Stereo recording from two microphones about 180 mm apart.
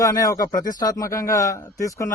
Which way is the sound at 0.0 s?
20° left (ahead or behind).